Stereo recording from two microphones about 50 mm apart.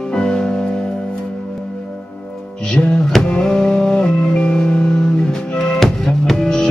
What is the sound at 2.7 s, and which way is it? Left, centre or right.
Music, left.